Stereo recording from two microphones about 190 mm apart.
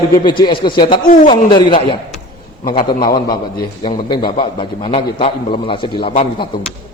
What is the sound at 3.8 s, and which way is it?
A man's voice, 25° left (ahead or behind).